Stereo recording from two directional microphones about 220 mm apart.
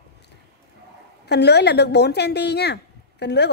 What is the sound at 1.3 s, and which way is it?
A woman's voice, 50° left (ahead or behind).